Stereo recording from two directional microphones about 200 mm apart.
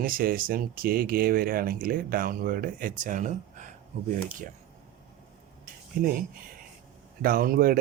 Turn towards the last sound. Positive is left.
turn(degrees=-45)  # may be behind; listen again after turning